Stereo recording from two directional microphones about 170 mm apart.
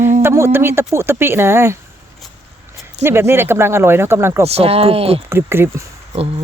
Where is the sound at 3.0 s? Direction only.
15° right (ahead or behind).